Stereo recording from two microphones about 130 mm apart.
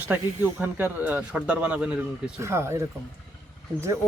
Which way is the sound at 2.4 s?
20° right (ahead or behind).